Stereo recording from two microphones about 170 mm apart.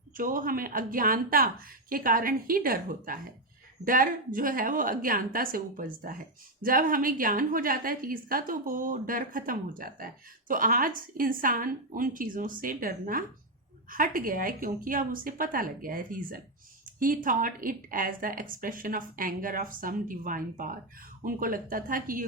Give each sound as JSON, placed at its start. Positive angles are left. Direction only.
{"t": 0.2, "sound": "a woman's voice", "side_deg": -55}